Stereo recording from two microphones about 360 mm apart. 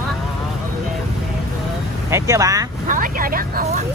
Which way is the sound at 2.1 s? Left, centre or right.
Centre.